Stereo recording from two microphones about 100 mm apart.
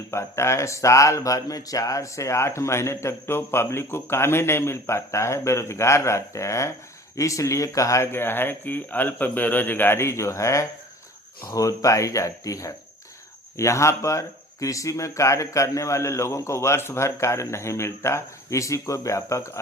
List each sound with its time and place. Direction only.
0.1 s speech: 30° left (ahead or behind)